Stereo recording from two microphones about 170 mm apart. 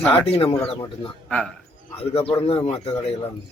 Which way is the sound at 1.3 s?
5° left (ahead or behind).